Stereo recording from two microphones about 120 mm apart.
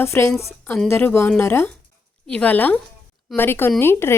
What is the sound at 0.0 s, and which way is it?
A woman's voice, 20° left (ahead or behind).